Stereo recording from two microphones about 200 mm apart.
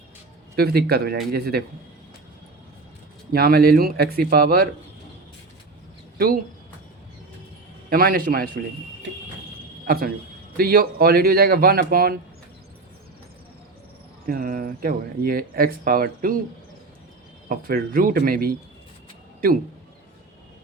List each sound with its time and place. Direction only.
0.5 s speech: 50° right (ahead or behind)
3.3 s speech: 50° right (ahead or behind)
6.1 s speech: 45° right (ahead or behind)
7.9 s speech: 45° right (ahead or behind)
9.8 s speech: 50° right (ahead or behind)
14.3 s speech: 45° right (ahead or behind)
17.5 s speech: 45° right (ahead or behind)